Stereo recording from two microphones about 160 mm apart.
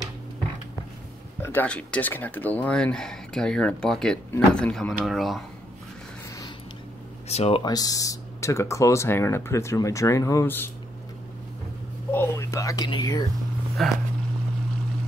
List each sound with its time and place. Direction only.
1.4 s speech: 10° left (ahead or behind)
7.2 s speech: 40° left (ahead or behind)
7.6 s speech: 25° left (ahead or behind)
12.1 s speech: 15° left (ahead or behind)
13.8 s speech: 5° left (ahead or behind)